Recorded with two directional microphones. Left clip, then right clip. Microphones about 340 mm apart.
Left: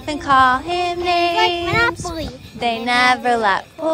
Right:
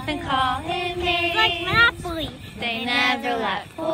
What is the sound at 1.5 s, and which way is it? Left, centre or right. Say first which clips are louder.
Child singing: left 1 dB; left.